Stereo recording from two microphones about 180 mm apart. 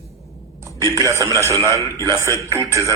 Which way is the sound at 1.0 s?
20° right (ahead or behind).